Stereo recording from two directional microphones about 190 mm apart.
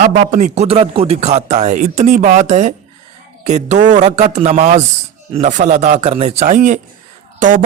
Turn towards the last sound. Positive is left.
turn(degrees=-45)  # may be behind; listen again after turning